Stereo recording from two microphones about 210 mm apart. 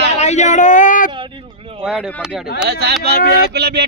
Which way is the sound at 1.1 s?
25° right (ahead or behind).